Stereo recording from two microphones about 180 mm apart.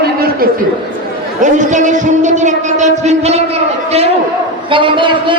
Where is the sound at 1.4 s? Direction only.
45° right (ahead or behind).